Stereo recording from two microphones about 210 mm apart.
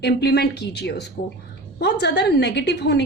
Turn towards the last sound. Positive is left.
turn(degrees=55)  # may be behind; listen again after turning